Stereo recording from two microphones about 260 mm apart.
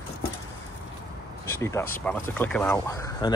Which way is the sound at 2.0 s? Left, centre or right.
Centre.